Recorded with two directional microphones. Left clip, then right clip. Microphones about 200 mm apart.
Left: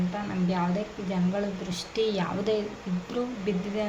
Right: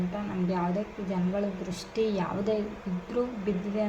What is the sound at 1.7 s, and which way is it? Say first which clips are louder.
Speech: left 2 dB; centre (ahead or behind).